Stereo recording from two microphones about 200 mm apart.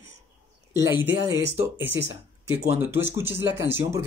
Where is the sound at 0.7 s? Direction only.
10° right (ahead or behind).